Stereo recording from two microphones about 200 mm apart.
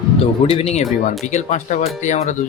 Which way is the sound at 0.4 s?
30° left (ahead or behind).